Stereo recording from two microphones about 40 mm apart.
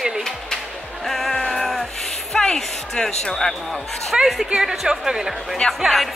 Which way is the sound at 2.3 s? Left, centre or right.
Centre.